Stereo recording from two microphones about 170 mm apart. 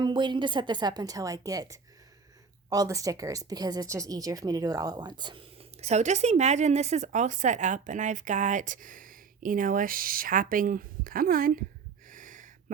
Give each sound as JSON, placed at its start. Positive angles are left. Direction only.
{"t": 0.0, "sound": "speech", "side_deg": -25}
{"t": 5.8, "sound": "speech", "side_deg": -40}
{"t": 12.0, "sound": "snort", "side_deg": -50}